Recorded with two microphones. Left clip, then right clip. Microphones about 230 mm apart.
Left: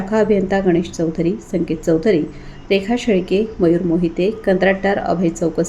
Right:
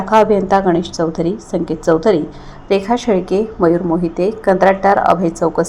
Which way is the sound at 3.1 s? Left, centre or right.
Right.